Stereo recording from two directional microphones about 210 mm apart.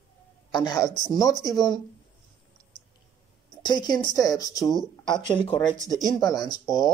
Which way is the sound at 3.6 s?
20° left (ahead or behind).